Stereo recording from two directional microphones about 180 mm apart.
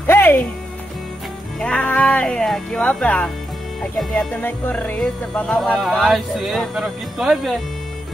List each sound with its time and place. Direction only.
0.0 s music: 10° left (ahead or behind)
1.6 s speech: 5° left (ahead or behind)
3.8 s music: 5° left (ahead or behind)